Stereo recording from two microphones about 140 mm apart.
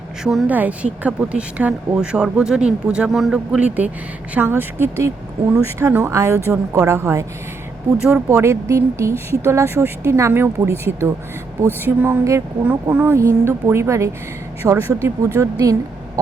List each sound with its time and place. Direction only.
0.2 s speech: 5° right (ahead or behind); by 15.7 s 25° right (ahead or behind)